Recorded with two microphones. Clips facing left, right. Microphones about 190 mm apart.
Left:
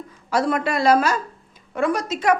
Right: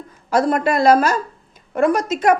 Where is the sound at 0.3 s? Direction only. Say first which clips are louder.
Right 4 dB; 45° right (ahead or behind).